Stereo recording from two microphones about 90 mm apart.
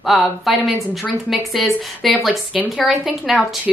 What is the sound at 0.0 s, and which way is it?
A woman's voice, centre (ahead or behind).